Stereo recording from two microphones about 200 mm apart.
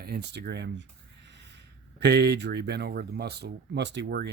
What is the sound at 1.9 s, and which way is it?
Speech, 55° right (ahead or behind).